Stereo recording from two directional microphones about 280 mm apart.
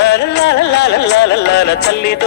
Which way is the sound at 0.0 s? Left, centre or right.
Left.